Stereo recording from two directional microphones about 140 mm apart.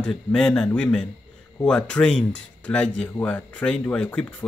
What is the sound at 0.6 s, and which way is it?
Speech, 15° left (ahead or behind).